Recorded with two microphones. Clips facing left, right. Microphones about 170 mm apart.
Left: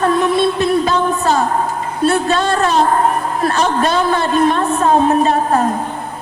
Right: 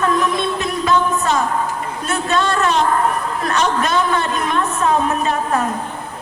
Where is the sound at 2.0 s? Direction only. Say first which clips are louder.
Left 5 dB; 35° left (ahead or behind).